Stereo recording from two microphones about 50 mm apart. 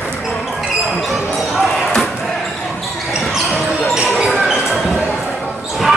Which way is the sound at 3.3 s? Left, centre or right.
Centre.